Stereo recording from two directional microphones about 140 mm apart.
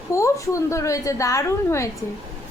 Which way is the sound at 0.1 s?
20° left (ahead or behind).